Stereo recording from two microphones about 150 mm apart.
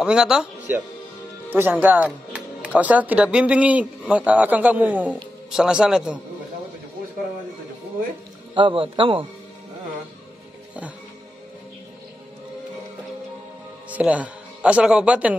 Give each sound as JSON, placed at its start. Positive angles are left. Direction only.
{"t": 0.0, "sound": "speech", "side_deg": -5}
{"t": 1.5, "sound": "speech", "side_deg": -15}
{"t": 8.5, "sound": "a man's voice", "side_deg": -35}
{"t": 13.8, "sound": "speech", "side_deg": -10}